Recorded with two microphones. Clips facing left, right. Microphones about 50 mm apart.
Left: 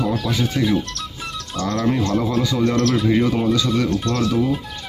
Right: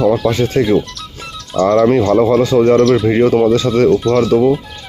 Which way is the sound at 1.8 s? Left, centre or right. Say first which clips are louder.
Right 6 dB; right.